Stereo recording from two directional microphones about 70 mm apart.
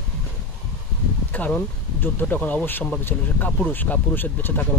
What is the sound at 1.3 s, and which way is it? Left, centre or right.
Speech, left.